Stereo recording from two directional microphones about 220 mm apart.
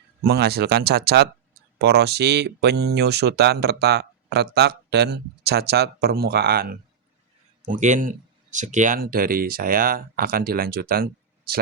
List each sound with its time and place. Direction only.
0.3 s speech: 45° right (ahead or behind)